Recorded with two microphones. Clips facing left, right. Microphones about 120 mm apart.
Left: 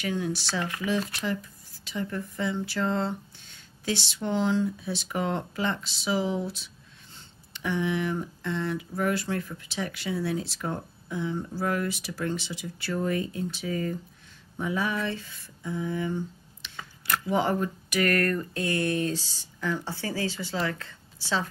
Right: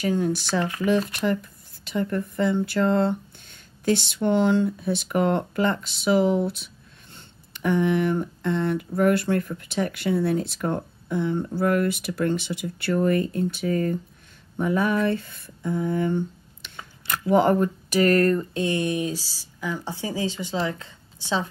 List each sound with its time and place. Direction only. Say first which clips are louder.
0.0 s speech: right 6 dB; 45° right (ahead or behind)
14.6 s a sound: right 7 dB; 50° right (ahead or behind)
17.3 s speech: right 8 dB; 55° right (ahead or behind)
17.8 s speech: right 6 dB; 30° right (ahead or behind)